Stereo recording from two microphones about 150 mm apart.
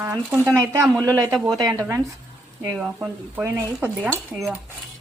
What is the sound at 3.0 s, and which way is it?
A woman's voice, 20° right (ahead or behind).